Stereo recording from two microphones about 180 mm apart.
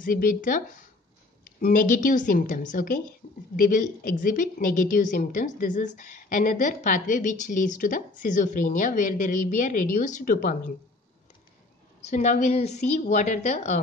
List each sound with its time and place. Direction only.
0.0 s a woman's voice: 50° left (ahead or behind)
12.0 s a woman's voice: 40° left (ahead or behind)